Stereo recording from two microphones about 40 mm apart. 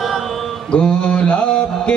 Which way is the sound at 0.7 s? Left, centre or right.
Left.